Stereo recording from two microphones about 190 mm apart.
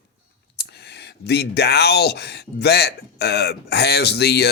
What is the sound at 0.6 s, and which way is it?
Speech, 60° left (ahead or behind).